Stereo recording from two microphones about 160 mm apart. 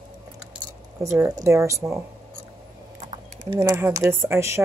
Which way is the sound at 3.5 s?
25° right (ahead or behind).